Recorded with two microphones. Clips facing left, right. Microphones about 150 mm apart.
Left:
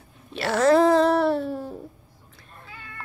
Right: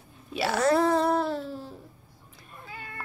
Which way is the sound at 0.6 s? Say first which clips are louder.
Left 6 dB; 90° left.